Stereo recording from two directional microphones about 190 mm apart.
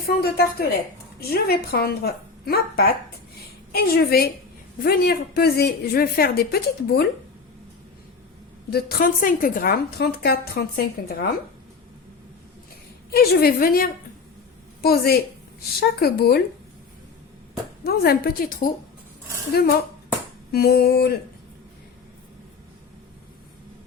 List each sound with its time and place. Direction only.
0.1 s a woman's voice: 55° left (ahead or behind)
8.7 s a woman's voice: 50° left (ahead or behind)
13.1 s a woman's voice: 55° left (ahead or behind)
17.8 s a woman's voice: 55° left (ahead or behind)